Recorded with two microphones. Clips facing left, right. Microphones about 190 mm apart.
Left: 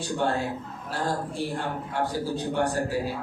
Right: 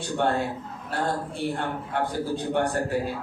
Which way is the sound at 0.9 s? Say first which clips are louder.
Right 1 dB; 60° right (ahead or behind).